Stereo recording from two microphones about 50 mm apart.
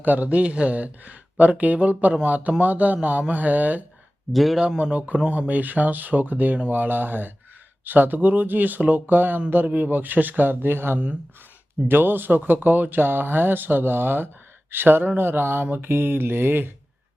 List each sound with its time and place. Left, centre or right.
0.0 s speech: right
4.3 s speech: centre
4.8 s speech: right
10.9 s speech: right
11.9 s speech: right